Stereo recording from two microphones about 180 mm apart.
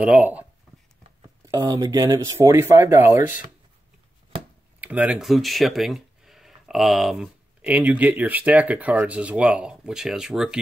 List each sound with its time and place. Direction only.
0.0 s speech: 5° right (ahead or behind)
1.4 s speech: 25° right (ahead or behind)
4.7 s speech: 10° right (ahead or behind)